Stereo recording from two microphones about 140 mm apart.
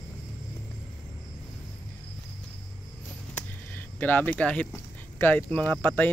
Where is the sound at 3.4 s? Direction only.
15° left (ahead or behind).